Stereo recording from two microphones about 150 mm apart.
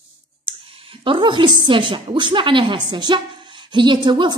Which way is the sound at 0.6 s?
40° right (ahead or behind).